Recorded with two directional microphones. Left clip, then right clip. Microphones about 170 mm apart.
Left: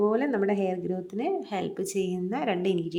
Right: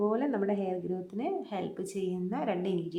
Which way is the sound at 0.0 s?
15° left (ahead or behind).